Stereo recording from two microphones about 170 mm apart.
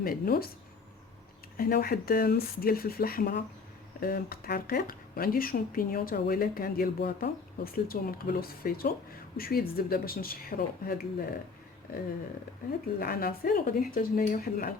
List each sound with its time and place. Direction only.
0.0 s speech: 60° left (ahead or behind)
1.5 s speech: 60° left (ahead or behind)
13.0 s speech: 60° left (ahead or behind)